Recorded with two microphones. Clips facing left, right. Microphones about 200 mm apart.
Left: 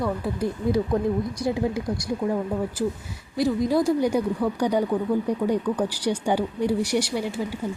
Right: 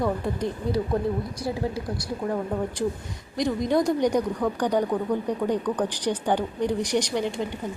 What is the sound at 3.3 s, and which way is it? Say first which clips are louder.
Speech: left 2 dB; 5° left (ahead or behind).